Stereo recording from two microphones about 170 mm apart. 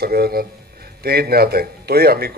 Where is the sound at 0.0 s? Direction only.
65° right (ahead or behind).